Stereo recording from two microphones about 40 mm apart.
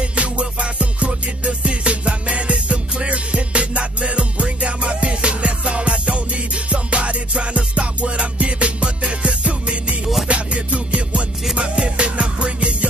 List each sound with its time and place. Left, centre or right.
0.0 s music: right